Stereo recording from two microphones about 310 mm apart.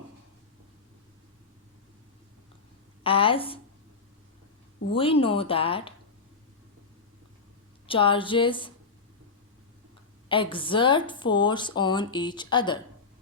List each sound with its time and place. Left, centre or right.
3.0 s speech: centre
4.9 s speech: centre
7.9 s speech: centre
10.2 s speech: centre